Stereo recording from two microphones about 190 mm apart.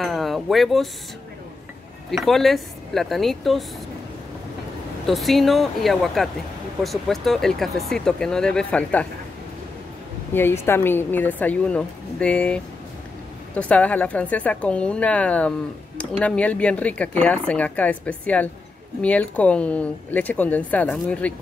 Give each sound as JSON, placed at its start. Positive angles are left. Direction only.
{"t": 0.0, "sound": "a sound", "side_deg": 0}
{"t": 2.0, "sound": "speech", "side_deg": 0}
{"t": 5.0, "sound": "speech", "side_deg": 0}
{"t": 10.3, "sound": "speech", "side_deg": 10}